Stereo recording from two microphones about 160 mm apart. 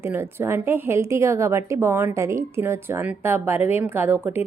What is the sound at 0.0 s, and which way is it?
A woman's voice, 15° right (ahead or behind).